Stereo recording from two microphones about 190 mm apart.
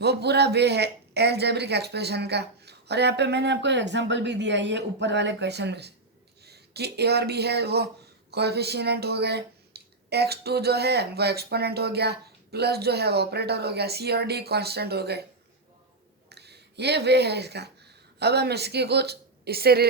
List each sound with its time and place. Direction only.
0.0 s speech: 60° right (ahead or behind)
16.3 s speech: 60° right (ahead or behind)